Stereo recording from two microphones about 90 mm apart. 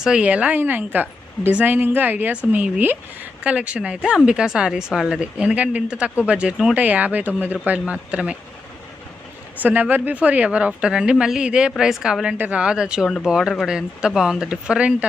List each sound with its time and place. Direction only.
0.0 s speech: 10° right (ahead or behind)
9.6 s speech: 20° right (ahead or behind)